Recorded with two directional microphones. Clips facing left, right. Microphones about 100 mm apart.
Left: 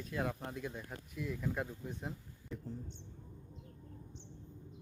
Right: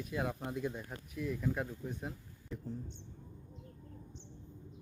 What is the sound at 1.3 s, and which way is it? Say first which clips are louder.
Speech: right 3 dB; centre (ahead or behind).